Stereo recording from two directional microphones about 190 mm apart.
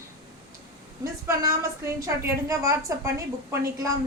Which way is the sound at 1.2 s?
15° right (ahead or behind).